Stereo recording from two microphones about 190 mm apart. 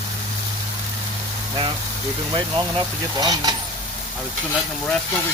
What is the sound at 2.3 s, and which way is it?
Speech, 25° right (ahead or behind).